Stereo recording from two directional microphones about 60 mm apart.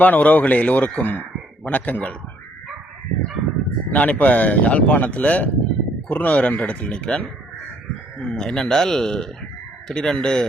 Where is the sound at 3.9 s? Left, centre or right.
Left.